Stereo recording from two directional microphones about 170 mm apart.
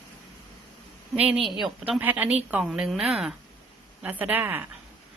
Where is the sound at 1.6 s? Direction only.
10° right (ahead or behind).